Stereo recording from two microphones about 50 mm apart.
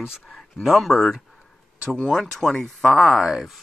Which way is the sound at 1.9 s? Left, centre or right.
Centre.